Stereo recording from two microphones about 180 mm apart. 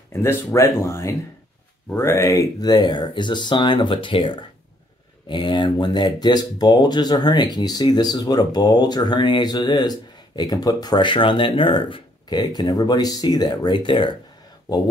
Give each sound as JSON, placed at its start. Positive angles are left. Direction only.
{"t": 0.1, "sound": "speech", "side_deg": 15}